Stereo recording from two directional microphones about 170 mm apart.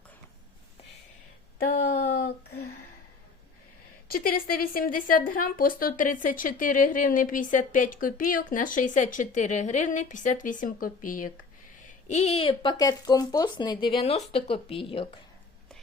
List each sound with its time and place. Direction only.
1.5 s a sound: 60° left (ahead or behind)
4.1 s a woman's voice: 60° left (ahead or behind)
12.0 s speech: 40° left (ahead or behind)